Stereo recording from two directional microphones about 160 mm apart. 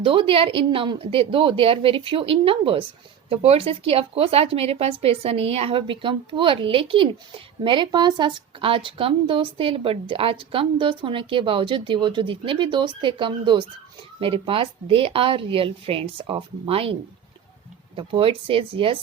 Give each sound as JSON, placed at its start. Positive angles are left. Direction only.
{"t": 0.0, "sound": "a woman's voice", "side_deg": -35}